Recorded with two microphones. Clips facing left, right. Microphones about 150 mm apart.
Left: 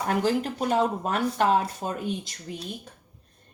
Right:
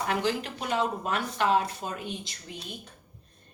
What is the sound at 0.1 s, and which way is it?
Speech, 45° left (ahead or behind).